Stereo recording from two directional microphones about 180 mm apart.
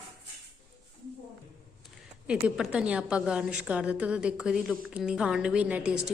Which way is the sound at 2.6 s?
5° right (ahead or behind).